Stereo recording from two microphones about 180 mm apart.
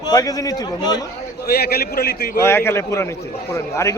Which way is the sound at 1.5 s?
60° left (ahead or behind).